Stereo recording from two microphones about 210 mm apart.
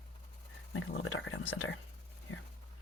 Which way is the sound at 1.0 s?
70° left (ahead or behind).